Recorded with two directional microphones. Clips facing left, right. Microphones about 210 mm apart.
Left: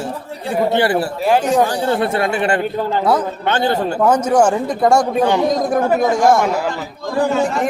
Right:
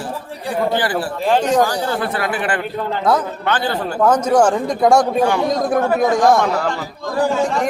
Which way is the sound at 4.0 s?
10° left (ahead or behind).